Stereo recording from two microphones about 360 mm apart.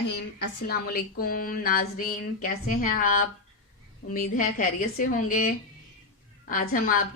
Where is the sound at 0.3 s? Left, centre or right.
Left.